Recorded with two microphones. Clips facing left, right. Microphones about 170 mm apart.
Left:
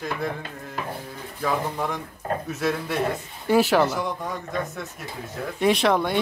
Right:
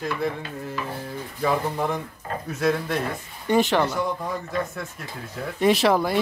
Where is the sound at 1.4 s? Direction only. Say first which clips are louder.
Right 2 dB; centre (ahead or behind).